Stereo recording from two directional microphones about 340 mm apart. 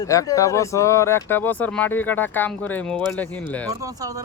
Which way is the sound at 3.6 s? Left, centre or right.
Centre.